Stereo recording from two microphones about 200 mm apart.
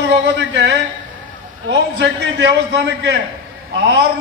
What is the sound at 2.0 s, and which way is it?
A man's voice, 60° right (ahead or behind).